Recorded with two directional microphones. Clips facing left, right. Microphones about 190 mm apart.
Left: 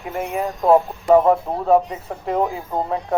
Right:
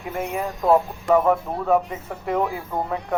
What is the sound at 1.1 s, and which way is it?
Speech, 30° left (ahead or behind).